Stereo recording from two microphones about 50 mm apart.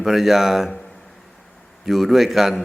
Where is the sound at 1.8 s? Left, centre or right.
Centre.